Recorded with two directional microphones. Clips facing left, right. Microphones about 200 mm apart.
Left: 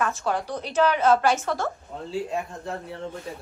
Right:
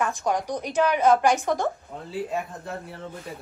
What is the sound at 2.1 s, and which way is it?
Speech, centre (ahead or behind).